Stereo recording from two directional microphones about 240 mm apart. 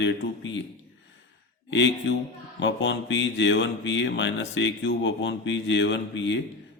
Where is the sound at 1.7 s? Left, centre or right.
Left.